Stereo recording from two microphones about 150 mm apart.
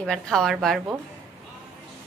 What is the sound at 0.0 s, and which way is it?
Speech, 5° left (ahead or behind).